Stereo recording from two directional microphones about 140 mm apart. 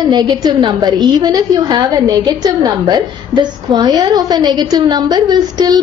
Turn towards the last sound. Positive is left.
turn(degrees=-30)  # may be behind; listen again after turning